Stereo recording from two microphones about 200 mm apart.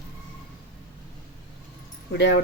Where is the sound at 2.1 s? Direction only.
60° left (ahead or behind).